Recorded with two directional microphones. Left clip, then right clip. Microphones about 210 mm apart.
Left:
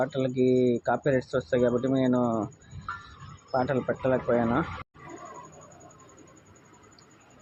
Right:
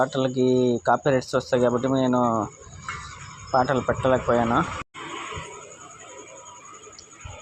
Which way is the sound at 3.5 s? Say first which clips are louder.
Right 6 dB; 10° right (ahead or behind).